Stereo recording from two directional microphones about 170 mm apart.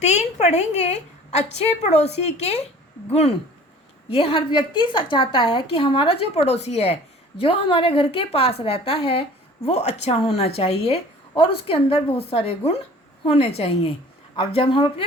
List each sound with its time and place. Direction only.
0.0 s a woman's voice: 40° left (ahead or behind)